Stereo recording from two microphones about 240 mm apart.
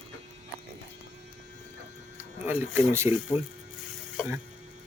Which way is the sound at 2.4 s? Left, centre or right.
Centre.